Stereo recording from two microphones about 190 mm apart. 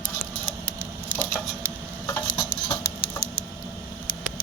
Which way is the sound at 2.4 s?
15° left (ahead or behind).